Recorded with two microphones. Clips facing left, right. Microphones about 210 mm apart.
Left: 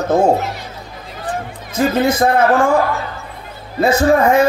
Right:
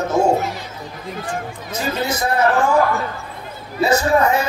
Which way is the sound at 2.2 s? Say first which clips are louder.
Left 7 dB; 60° left (ahead or behind).